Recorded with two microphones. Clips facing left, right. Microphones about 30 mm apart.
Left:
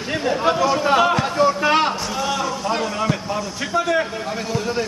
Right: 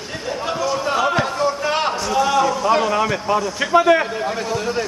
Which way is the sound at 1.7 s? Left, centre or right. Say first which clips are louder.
Right 1 dB; centre.